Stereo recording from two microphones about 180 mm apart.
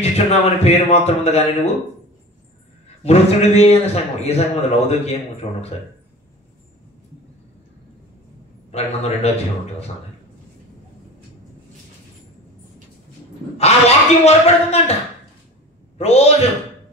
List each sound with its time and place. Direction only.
0.0 s a man's voice: 35° left (ahead or behind)
3.0 s a man's voice: 35° left (ahead or behind)
8.7 s a man's voice: 35° left (ahead or behind)
13.6 s a man's voice: 35° left (ahead or behind)
16.0 s a man's voice: 35° left (ahead or behind)